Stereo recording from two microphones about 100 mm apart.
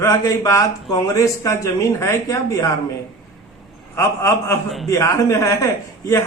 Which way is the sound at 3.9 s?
30° left (ahead or behind).